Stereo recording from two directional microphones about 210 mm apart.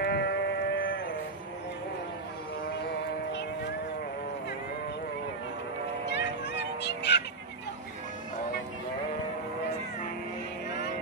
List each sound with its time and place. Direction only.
0.0 s sheep: 50° left (ahead or behind)
6.0 s music: 55° left (ahead or behind)